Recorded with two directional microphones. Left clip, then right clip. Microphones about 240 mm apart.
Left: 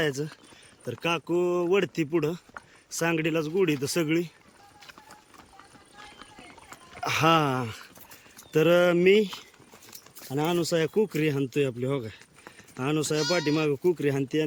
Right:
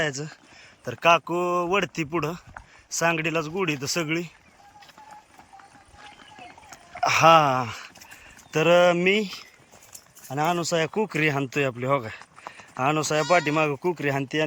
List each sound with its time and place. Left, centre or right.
0.0 s speech: centre
6.9 s speech: centre